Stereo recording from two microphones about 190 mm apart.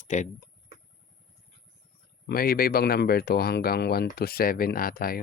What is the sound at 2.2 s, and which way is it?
Speech, 50° left (ahead or behind).